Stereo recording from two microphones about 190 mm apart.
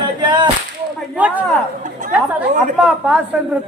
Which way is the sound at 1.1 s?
10° right (ahead or behind).